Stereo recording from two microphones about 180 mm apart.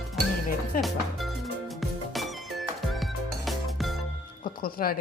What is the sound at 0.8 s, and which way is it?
Music, centre (ahead or behind).